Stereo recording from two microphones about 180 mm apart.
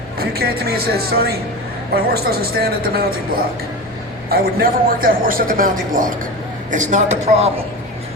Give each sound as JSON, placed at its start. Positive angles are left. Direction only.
{"t": 0.2, "sound": "a woman's voice", "side_deg": -55}